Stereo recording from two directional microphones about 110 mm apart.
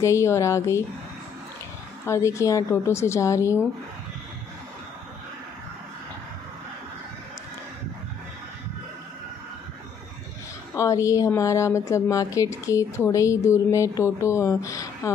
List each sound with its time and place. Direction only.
0.0 s a woman's voice: 25° left (ahead or behind)
2.0 s a woman's voice: 25° left (ahead or behind)
10.8 s a woman's voice: 30° left (ahead or behind)